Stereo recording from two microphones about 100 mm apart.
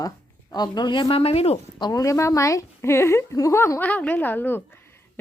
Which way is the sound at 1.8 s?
35° left (ahead or behind).